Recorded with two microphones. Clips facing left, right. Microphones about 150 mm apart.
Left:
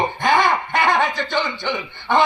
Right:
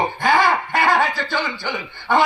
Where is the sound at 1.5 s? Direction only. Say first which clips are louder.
Left 2 dB; 25° left (ahead or behind).